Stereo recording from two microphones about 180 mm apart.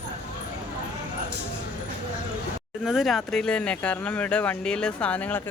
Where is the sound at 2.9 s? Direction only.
Centre (ahead or behind).